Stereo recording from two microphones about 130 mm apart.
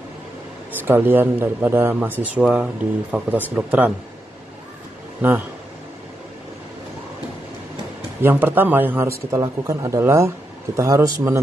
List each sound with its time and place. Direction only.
0.8 s speech: 15° right (ahead or behind)
8.2 s a man's voice: 15° right (ahead or behind)